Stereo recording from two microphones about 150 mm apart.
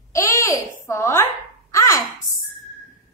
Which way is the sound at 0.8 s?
15° left (ahead or behind).